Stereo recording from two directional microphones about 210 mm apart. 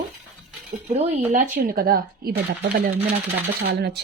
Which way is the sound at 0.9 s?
30° right (ahead or behind).